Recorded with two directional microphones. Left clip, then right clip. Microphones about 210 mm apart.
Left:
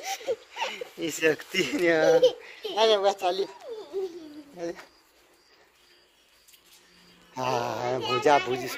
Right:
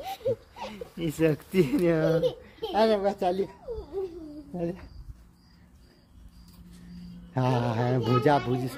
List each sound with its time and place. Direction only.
0.0 s a sound: centre (ahead or behind)
0.7 s speech: 5° left (ahead or behind)
7.3 s a child's voice: centre (ahead or behind)